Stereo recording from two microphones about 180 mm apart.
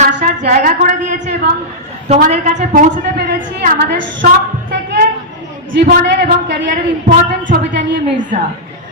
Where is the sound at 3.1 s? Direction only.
75° right (ahead or behind).